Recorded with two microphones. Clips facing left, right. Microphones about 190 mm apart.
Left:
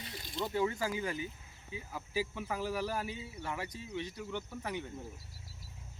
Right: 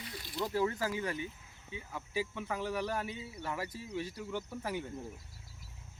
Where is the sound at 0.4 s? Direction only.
Centre (ahead or behind).